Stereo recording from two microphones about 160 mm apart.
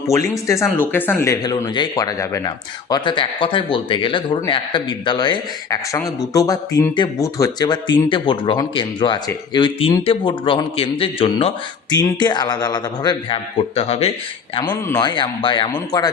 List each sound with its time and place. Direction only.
0.8 s speech: 10° left (ahead or behind); by 11.5 s 35° left (ahead or behind)
11.9 s speech: 25° left (ahead or behind)
13.7 s speech: 40° left (ahead or behind)
14.7 s speech: 15° left (ahead or behind)
15.0 s speech: 30° left (ahead or behind)